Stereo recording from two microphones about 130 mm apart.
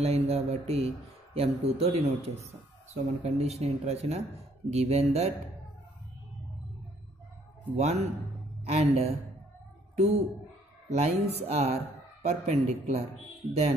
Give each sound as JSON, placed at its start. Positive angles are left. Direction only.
{"t": 0.0, "sound": "speech", "side_deg": -50}
{"t": 7.7, "sound": "a woman's voice", "side_deg": -55}